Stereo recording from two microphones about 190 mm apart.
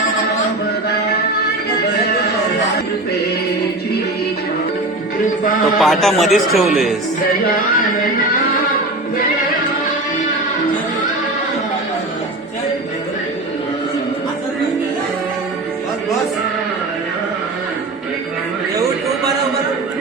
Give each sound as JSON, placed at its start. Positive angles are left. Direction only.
{"t": 5.4, "sound": "music", "side_deg": 45}
{"t": 5.8, "sound": "speech", "side_deg": 0}
{"t": 7.4, "sound": "music", "side_deg": 45}